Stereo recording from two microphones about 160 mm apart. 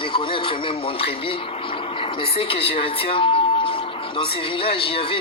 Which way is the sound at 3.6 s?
35° left (ahead or behind).